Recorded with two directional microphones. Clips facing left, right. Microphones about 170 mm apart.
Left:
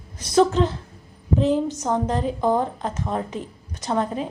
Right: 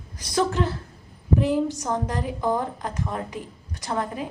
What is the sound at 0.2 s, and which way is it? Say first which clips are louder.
A woman's voice: left 6 dB; 20° left (ahead or behind).